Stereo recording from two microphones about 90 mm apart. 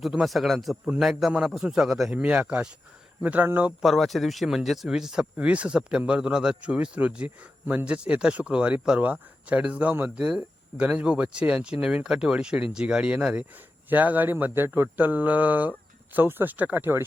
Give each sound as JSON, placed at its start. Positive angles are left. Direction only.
{"t": 0.0, "sound": "speech", "side_deg": -5}
{"t": 2.2, "sound": "speech", "side_deg": -15}
{"t": 3.7, "sound": "speech", "side_deg": 0}